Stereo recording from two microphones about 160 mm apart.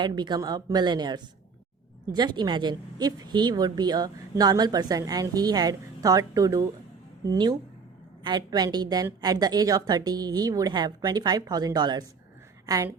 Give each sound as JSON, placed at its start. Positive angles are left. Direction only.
{"t": 0.0, "sound": "a woman's voice", "side_deg": -25}